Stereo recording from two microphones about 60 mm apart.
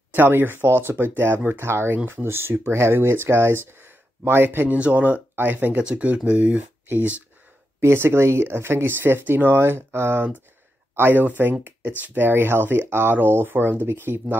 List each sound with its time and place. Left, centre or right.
0.1 s speech: right
4.7 s speech: right
5.9 s speech: centre
7.8 s speech: right